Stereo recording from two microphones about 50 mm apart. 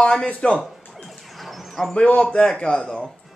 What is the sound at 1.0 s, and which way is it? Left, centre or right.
Bird, centre.